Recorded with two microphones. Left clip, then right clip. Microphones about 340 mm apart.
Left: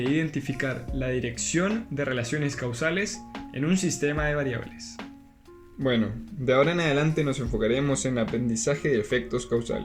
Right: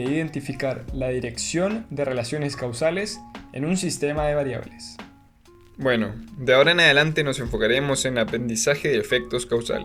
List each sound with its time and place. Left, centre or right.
0.1 s speech: centre
5.8 s speech: right